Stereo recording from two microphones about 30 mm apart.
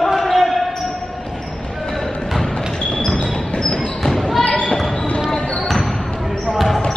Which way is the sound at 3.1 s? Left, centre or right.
Left.